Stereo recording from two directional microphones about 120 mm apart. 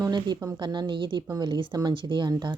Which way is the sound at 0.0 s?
35° right (ahead or behind).